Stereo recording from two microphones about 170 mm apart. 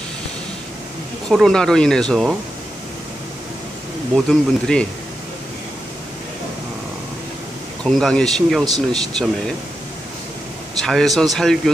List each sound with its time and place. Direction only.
1.3 s speech: centre (ahead or behind)
4.1 s speech: 5° left (ahead or behind)
7.8 s speech: 5° left (ahead or behind)
10.8 s speech: centre (ahead or behind)